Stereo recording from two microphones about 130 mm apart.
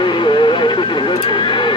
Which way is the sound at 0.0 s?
40° left (ahead or behind).